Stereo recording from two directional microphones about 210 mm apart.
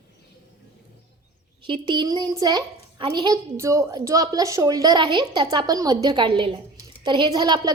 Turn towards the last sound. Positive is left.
turn(degrees=-20)  # may be behind; listen again after turning